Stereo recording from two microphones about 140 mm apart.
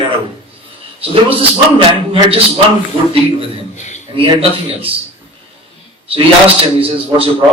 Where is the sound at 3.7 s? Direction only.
55° left (ahead or behind).